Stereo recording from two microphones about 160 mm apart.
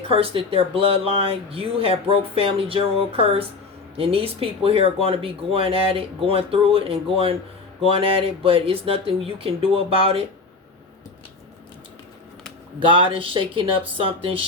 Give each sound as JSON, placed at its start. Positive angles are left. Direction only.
{"t": 0.0, "sound": "speech", "side_deg": -35}
{"t": 12.8, "sound": "speech", "side_deg": -30}